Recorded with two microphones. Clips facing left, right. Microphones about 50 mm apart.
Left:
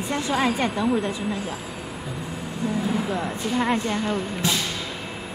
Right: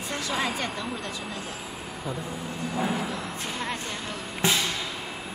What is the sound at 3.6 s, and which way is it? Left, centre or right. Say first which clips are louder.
Speech: left 11 dB; left.